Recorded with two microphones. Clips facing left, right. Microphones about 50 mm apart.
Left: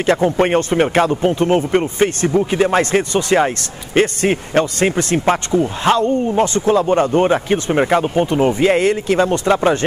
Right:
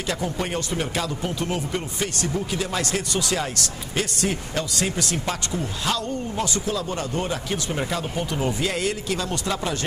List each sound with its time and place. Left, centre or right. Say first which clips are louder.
0.0 s speech: left 12 dB; left